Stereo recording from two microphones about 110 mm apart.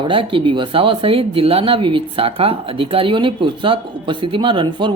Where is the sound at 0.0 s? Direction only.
55° right (ahead or behind).